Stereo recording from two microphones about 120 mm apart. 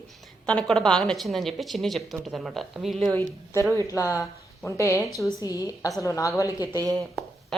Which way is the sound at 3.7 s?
25° left (ahead or behind).